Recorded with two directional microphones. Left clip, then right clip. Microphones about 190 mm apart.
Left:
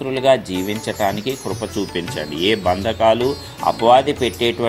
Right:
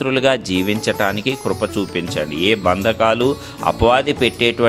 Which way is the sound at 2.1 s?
25° right (ahead or behind).